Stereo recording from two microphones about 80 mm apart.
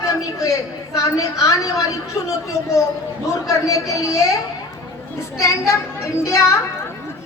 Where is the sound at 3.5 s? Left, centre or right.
Left.